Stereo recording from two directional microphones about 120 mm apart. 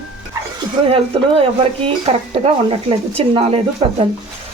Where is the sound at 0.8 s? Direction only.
55° right (ahead or behind).